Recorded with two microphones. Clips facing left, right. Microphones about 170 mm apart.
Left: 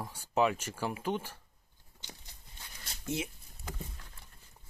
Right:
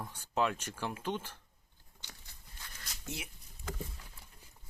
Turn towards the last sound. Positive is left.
turn(degrees=25)  # may be behind; listen again after turning